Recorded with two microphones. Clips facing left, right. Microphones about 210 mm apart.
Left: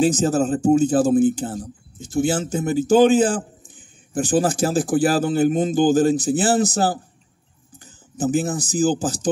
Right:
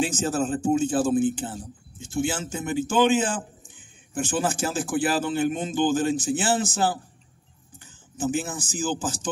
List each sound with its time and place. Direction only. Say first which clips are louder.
0.0 s speech: left 7 dB; 40° left (ahead or behind)